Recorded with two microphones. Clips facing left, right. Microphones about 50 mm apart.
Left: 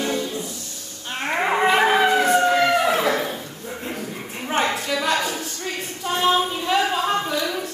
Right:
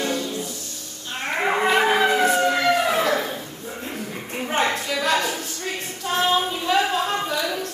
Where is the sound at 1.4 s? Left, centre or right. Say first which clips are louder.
Left 1 dB; centre.